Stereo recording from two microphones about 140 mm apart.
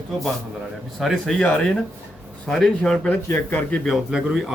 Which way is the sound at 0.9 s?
Centre (ahead or behind).